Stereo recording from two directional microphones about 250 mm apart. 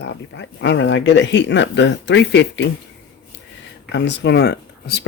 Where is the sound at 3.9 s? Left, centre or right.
Left.